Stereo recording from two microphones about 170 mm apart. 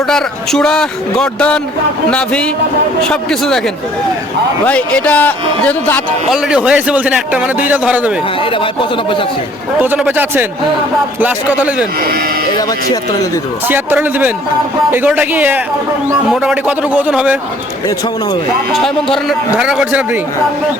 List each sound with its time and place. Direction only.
0.1 s a man's voice: 5° left (ahead or behind)
4.6 s a man's voice: 5° left (ahead or behind)
6.3 s a man's voice: 5° right (ahead or behind)
8.4 s speech: 30° left (ahead or behind)
9.7 s a man's voice: 10° right (ahead or behind)
13.7 s a man's voice: 10° right (ahead or behind)
19.1 s a man's voice: 5° right (ahead or behind)